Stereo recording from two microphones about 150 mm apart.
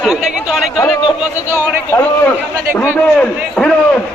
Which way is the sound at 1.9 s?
10° left (ahead or behind).